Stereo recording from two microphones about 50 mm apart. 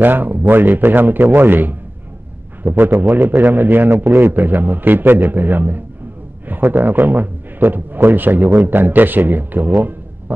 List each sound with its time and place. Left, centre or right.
0.0 s a man's voice: right